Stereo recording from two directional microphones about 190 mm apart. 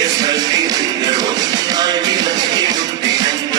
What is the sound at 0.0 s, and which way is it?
Music, 20° right (ahead or behind).